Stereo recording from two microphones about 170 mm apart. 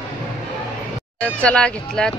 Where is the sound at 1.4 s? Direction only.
5° left (ahead or behind).